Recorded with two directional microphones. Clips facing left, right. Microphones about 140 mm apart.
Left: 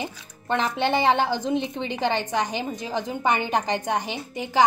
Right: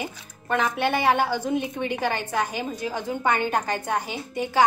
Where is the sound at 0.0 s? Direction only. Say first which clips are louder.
Left 1 dB; 25° left (ahead or behind).